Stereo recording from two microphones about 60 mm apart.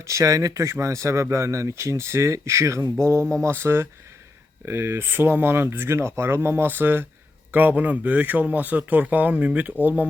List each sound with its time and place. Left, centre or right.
0.0 s a man's voice: right